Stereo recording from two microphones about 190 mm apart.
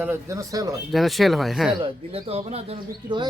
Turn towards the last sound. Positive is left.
turn(degrees=-30)  # may be behind; listen again after turning